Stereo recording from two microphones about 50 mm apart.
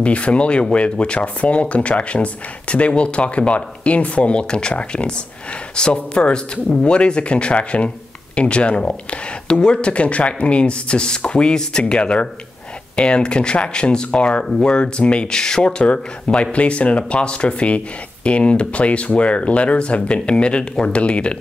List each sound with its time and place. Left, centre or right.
0.0 s speech: left